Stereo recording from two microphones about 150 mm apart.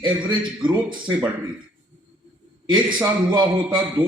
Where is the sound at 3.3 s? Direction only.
30° right (ahead or behind).